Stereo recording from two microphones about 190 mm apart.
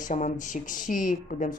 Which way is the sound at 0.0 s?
40° left (ahead or behind).